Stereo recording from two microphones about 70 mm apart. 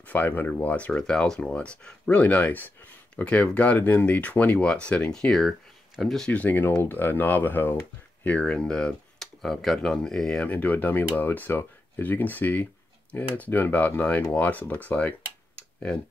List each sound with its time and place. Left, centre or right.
0.0 s speech: left; by 6.3 s centre
6.3 s speech: left
8.2 s speech: centre
10.4 s speech: left